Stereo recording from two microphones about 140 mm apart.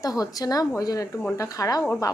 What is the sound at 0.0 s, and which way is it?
A woman's voice, 25° left (ahead or behind).